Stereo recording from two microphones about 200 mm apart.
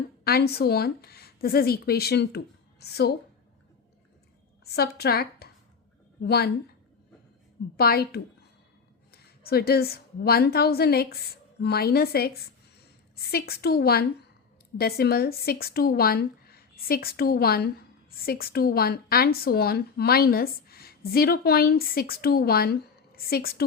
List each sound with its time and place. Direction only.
0.3 s speech: 50° left (ahead or behind)
4.6 s speech: 50° left (ahead or behind)
7.8 s a woman's voice: 50° left (ahead or behind)